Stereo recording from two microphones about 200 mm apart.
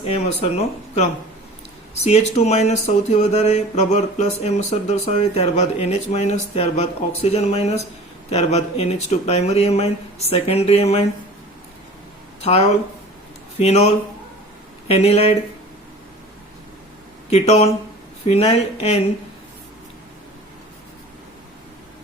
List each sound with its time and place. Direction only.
0.0 s speech: 30° left (ahead or behind)
2.0 s speech: 35° left (ahead or behind)
12.4 s speech: 30° left (ahead or behind)
17.2 s speech: 30° left (ahead or behind)